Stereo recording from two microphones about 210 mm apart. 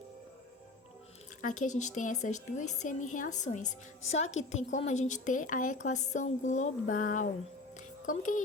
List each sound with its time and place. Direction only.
1.4 s a woman's voice: 35° left (ahead or behind)